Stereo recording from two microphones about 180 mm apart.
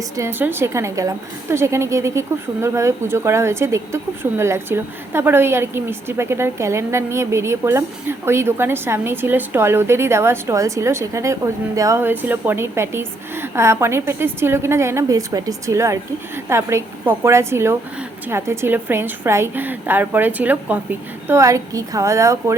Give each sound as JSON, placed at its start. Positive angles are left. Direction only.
{"t": 0.2, "sound": "a woman's voice", "side_deg": -10}